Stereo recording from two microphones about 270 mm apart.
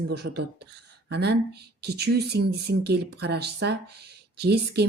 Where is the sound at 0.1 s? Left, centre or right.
Right.